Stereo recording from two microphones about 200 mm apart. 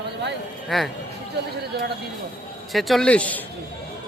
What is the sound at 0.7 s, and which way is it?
Speech, centre (ahead or behind).